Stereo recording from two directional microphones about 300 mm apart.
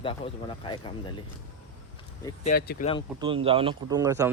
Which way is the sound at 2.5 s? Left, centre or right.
Left.